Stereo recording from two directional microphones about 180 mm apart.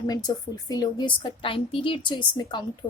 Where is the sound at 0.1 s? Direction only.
20° left (ahead or behind).